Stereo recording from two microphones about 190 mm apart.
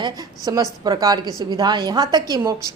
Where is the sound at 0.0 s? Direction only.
20° right (ahead or behind).